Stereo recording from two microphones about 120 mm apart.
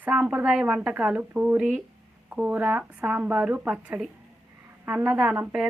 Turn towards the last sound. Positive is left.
turn(degrees=-10)  # may be behind; listen again after turning